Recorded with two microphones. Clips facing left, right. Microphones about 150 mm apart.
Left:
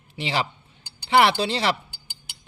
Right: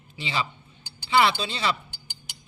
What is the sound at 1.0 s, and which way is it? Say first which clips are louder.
Speech: left 3 dB; 60° left (ahead or behind).